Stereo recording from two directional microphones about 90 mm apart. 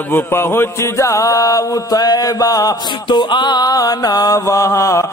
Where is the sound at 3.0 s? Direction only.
60° left (ahead or behind); by 5.0 s 35° left (ahead or behind).